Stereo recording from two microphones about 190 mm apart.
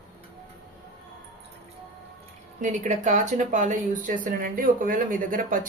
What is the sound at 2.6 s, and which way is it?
Speech, 40° right (ahead or behind).